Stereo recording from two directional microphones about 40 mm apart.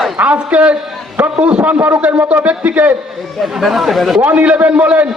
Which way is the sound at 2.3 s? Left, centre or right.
Right.